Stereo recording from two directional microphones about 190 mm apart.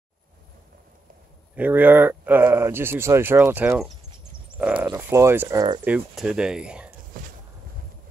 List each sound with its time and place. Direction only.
1.5 s speech: 10° right (ahead or behind)
4.6 s a sound: 5° right (ahead or behind)
4.8 s speech: 15° right (ahead or behind)
5.9 s speech: 5° right (ahead or behind)